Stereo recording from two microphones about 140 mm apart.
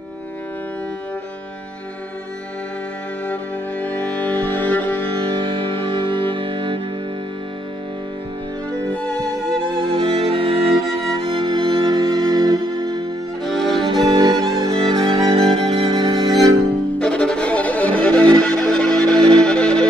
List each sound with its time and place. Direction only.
4.0 s music: 10° left (ahead or behind)
5.2 s music: 40° right (ahead or behind)
9.8 s music: 40° right (ahead or behind)
13.4 s violin: centre (ahead or behind)
14.0 s music: 30° right (ahead or behind)
17.0 s music: 5° left (ahead or behind)